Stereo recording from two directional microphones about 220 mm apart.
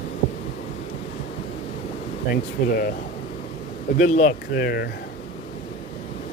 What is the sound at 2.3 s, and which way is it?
Speech, 40° left (ahead or behind).